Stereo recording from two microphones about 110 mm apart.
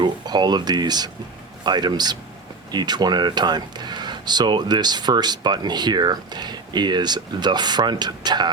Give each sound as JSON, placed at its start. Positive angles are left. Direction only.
{"t": 0.0, "sound": "speech", "side_deg": -40}